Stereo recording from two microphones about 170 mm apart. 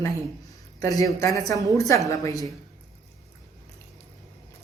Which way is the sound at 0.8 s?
20° left (ahead or behind).